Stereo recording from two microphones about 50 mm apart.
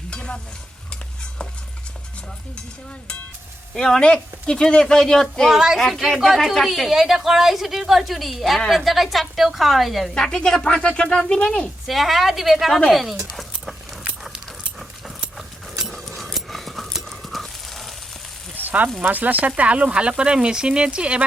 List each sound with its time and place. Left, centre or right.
0.1 s stir: left
3.8 s speech: centre
5.5 s a woman's voice: centre
10.2 s speech: centre
11.9 s a woman's voice: centre
12.9 s a sound: centre
15.9 s horse: centre
18.5 s sizzle: right
19.0 s speech: right